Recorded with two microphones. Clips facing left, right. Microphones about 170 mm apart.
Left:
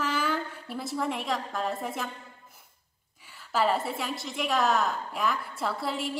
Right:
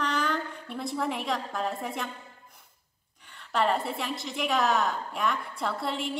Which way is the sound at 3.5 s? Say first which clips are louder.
Even; centre (ahead or behind).